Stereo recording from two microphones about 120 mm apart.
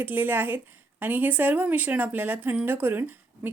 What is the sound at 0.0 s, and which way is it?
Speech, 15° right (ahead or behind).